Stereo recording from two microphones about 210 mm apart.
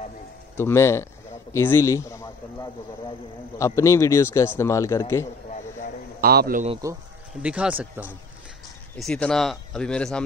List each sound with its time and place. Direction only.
0.6 s a man's voice: 10° left (ahead or behind)
6.2 s a man's voice: 45° right (ahead or behind)
7.4 s speech: 5° right (ahead or behind)
8.9 s speech: 5° left (ahead or behind)